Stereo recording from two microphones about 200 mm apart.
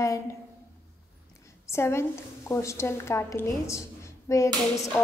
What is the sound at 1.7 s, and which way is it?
A woman's voice, 15° left (ahead or behind).